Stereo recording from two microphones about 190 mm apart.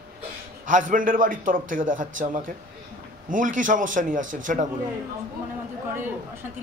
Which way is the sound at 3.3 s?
45° right (ahead or behind).